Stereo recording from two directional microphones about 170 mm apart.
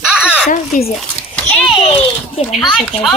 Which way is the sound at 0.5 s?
35° left (ahead or behind).